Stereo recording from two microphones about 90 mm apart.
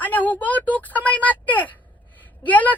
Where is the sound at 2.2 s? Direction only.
15° left (ahead or behind).